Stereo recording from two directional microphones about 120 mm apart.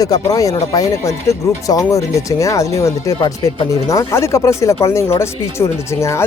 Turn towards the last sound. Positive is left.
turn(degrees=25)  # may be behind; listen again after turning